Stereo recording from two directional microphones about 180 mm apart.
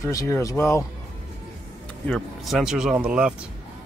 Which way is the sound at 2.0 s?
5° left (ahead or behind).